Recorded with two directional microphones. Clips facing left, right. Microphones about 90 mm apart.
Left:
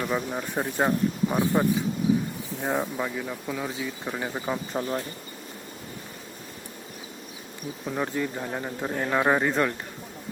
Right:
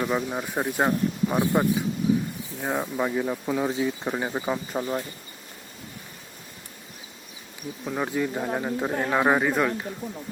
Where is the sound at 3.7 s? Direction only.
25° right (ahead or behind).